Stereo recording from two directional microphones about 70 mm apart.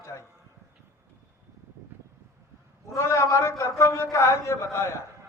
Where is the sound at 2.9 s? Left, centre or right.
Left.